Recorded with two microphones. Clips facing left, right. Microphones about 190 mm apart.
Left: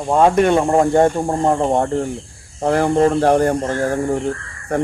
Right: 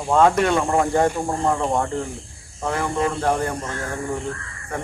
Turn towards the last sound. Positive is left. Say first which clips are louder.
# left 10 dB
turn(degrees=40)  # may be behind; listen again after turning